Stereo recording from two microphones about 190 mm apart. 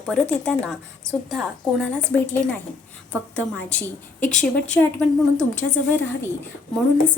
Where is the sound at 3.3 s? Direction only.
5° left (ahead or behind).